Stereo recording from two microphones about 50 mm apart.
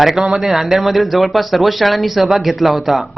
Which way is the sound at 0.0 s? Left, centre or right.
Centre.